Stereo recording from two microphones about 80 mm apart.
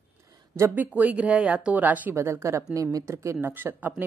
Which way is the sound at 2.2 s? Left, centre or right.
Right.